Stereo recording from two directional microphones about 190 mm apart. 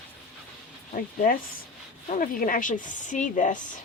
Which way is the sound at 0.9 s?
50° left (ahead or behind).